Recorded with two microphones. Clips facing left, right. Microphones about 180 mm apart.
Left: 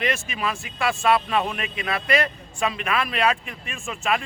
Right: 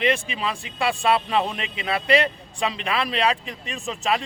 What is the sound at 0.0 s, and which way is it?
A man's voice, 30° right (ahead or behind).